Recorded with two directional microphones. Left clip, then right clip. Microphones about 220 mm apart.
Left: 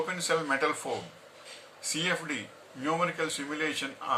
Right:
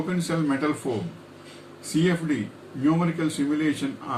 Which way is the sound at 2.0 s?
5° left (ahead or behind).